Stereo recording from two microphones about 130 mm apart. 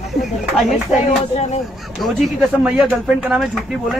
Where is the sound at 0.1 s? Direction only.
Centre (ahead or behind).